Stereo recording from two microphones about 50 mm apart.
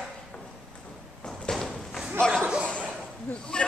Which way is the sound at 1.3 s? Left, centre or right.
Centre.